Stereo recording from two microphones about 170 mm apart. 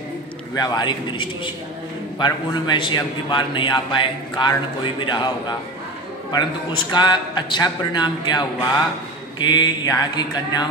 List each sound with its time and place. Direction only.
0.6 s a man's voice: 25° left (ahead or behind)